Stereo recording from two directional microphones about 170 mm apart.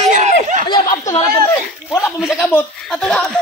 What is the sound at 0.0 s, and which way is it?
Snicker, 45° right (ahead or behind).